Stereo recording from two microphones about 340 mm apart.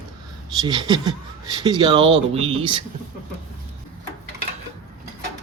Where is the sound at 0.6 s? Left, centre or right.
Centre.